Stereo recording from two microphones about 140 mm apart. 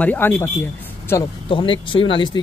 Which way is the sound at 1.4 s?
35° left (ahead or behind).